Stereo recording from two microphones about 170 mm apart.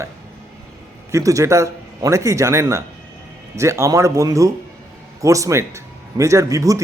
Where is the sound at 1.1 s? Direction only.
20° right (ahead or behind).